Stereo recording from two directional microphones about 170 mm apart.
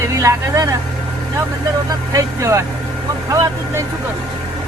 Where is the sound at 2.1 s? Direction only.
15° right (ahead or behind).